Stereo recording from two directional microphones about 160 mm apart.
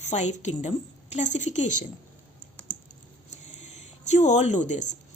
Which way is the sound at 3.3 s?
45° left (ahead or behind).